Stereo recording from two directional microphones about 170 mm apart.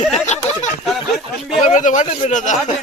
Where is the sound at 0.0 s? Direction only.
45° left (ahead or behind).